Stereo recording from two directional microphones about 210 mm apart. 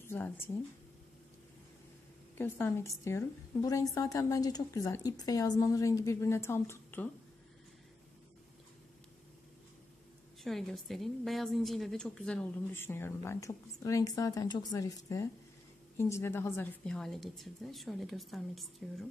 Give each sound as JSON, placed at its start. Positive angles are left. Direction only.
{"t": 0.0, "sound": "a sound", "side_deg": 10}
{"t": 2.3, "sound": "a woman's voice", "side_deg": 10}
{"t": 10.4, "sound": "a woman's voice", "side_deg": 0}